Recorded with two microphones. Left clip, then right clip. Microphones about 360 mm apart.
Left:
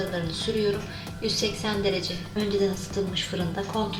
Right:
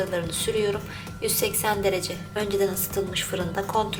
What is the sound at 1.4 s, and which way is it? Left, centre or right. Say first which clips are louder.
A woman's voice: right 5 dB; right.